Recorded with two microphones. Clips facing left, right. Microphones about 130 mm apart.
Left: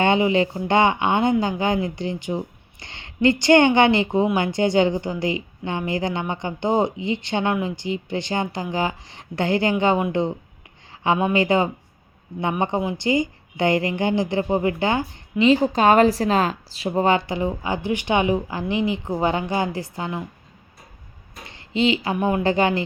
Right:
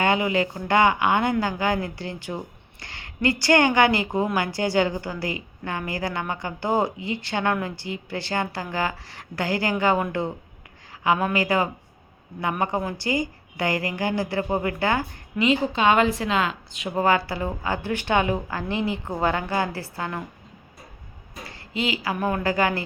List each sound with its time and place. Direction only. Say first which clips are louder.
0.0 s a woman's voice: left 4 dB; 25° left (ahead or behind)
11.0 s a woman's voice: left 3 dB; 25° left (ahead or behind)
15.4 s a woman's voice: left 4 dB; 40° left (ahead or behind)
16.9 s speech: left 2 dB; 20° left (ahead or behind)
21.4 s a woman's voice: left 7 dB; 25° left (ahead or behind)